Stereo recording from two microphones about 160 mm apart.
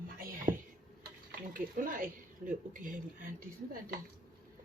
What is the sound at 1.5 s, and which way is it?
Speech, 60° right (ahead or behind).